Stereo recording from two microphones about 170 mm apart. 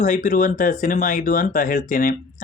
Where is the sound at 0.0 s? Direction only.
50° left (ahead or behind).